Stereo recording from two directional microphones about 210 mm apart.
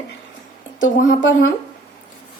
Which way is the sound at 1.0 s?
40° left (ahead or behind).